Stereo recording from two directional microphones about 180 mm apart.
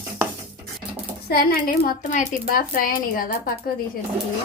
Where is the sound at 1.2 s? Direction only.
60° left (ahead or behind).